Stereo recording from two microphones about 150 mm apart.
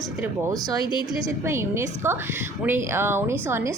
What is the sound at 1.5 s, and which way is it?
A woman's voice, 15° right (ahead or behind).